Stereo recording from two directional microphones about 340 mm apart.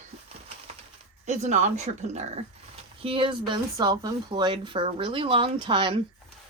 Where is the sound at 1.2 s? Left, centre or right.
Centre.